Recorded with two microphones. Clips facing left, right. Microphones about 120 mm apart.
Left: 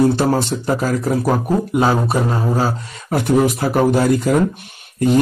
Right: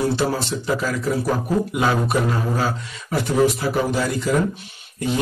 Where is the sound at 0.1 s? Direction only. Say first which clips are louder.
Left 5 dB; 50° left (ahead or behind).